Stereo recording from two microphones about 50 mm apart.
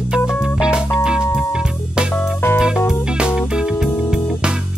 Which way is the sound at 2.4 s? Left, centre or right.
Left.